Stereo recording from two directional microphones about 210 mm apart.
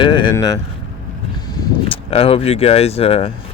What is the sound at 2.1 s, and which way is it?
Speech, 25° left (ahead or behind).